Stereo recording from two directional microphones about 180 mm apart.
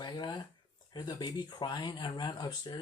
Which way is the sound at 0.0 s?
25° left (ahead or behind).